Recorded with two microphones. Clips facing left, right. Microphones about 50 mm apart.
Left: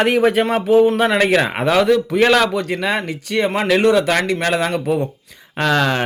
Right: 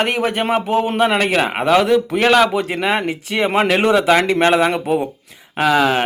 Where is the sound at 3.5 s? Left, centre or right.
Right.